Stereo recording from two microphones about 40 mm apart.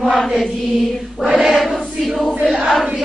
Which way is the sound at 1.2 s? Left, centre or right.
Centre.